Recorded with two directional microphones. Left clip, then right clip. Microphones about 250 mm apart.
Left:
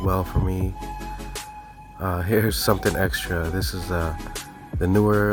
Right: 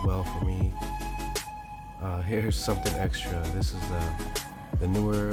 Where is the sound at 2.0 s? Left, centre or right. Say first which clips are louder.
Left 9 dB; left.